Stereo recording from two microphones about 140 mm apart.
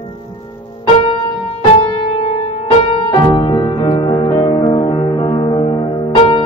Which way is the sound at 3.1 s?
35° left (ahead or behind).